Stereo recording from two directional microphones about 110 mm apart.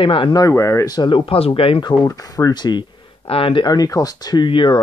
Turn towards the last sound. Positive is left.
turn(degrees=50)  # may be behind; listen again after turning